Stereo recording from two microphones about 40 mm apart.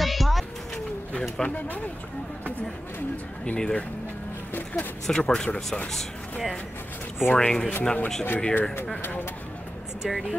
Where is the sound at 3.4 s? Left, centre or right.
Left.